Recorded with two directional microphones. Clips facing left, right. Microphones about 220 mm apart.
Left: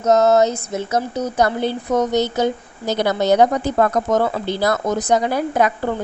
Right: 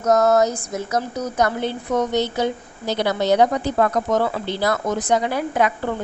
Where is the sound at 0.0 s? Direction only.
25° left (ahead or behind).